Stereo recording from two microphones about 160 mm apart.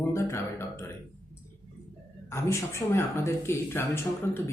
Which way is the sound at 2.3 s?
15° left (ahead or behind).